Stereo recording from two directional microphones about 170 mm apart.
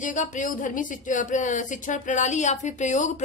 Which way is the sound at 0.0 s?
50° left (ahead or behind).